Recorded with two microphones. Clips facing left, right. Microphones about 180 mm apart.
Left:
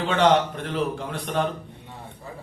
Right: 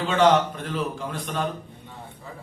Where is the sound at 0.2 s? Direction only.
65° left (ahead or behind).